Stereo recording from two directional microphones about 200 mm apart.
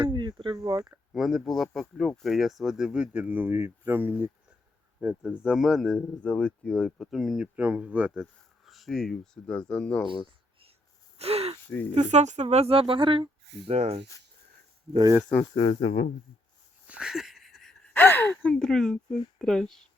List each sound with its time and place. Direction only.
0.0 s speech: 25° right (ahead or behind)
1.1 s speech: centre (ahead or behind)
11.2 s speech: 30° right (ahead or behind)
14.9 s speech: 20° right (ahead or behind)
15.2 s speech: 5° left (ahead or behind)
15.5 s speech: 25° left (ahead or behind)
16.8 s a sound: 5° right (ahead or behind)
19.4 s speech: 5° left (ahead or behind)